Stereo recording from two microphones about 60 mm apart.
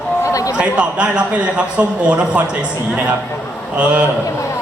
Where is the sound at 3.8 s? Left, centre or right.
Right.